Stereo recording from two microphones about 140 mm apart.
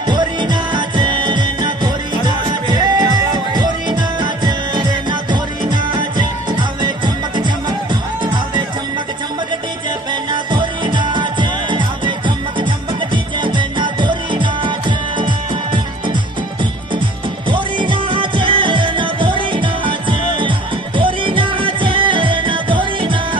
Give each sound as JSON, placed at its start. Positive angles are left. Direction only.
{"t": 0.0, "sound": "music", "side_deg": -30}
{"t": 7.9, "sound": "music", "side_deg": -35}
{"t": 10.3, "sound": "music", "side_deg": -35}
{"t": 17.5, "sound": "music", "side_deg": -35}